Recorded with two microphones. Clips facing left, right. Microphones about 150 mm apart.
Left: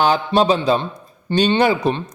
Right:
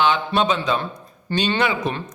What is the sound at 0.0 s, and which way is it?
A man's voice, 40° left (ahead or behind).